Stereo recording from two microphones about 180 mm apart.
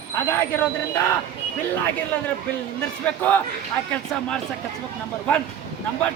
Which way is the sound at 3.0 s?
10° left (ahead or behind).